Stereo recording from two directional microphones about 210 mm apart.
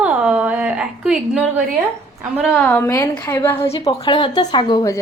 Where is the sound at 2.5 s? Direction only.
10° left (ahead or behind).